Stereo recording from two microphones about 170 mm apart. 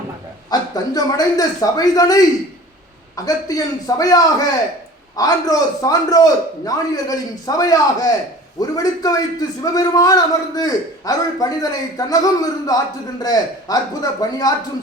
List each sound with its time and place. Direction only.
0.5 s a man's voice: 25° left (ahead or behind)